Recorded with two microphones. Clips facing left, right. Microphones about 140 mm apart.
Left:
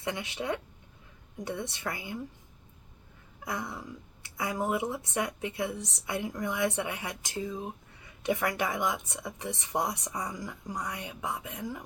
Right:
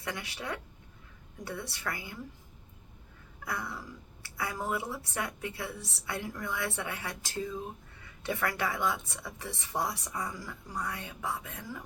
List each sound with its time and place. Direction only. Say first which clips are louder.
0.0 s a woman's voice: left 4 dB; 20° left (ahead or behind)
3.4 s a woman's voice: left 2 dB; 20° left (ahead or behind)